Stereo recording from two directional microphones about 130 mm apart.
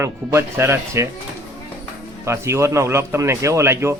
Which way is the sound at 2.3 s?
20° right (ahead or behind).